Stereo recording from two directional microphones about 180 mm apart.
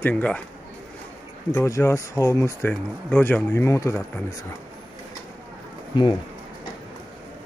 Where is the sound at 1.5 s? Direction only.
15° left (ahead or behind).